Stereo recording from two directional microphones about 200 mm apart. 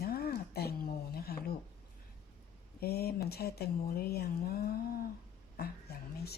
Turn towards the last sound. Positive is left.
turn(degrees=50)  # may be behind; listen again after turning